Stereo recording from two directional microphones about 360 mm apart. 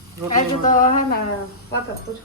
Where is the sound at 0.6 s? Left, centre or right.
Left.